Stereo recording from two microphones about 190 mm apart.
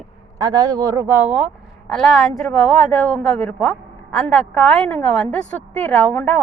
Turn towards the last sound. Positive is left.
turn(degrees=10)  # may be behind; listen again after turning